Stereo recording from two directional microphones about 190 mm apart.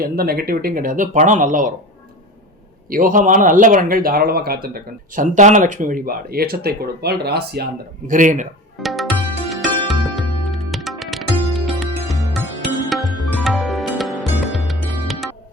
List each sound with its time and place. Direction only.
0.0 s speech: 50° right (ahead or behind)
2.9 s speech: 45° right (ahead or behind)
8.8 s music: centre (ahead or behind)